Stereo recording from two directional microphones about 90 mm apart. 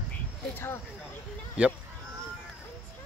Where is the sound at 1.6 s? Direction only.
10° right (ahead or behind).